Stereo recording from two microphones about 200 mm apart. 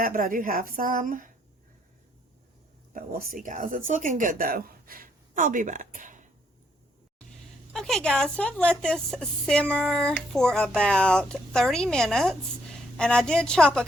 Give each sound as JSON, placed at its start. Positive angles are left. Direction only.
{"t": 0.0, "sound": "a woman's voice", "side_deg": -45}
{"t": 2.9, "sound": "speech", "side_deg": -50}
{"t": 7.7, "sound": "speech", "side_deg": 0}